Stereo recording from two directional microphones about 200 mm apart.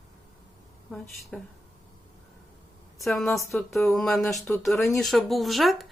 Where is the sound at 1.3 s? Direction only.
5° left (ahead or behind).